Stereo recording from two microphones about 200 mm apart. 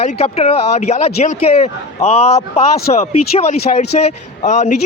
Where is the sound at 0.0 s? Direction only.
30° left (ahead or behind).